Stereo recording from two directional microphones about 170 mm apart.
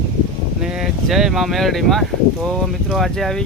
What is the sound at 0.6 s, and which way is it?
Speech, 5° right (ahead or behind).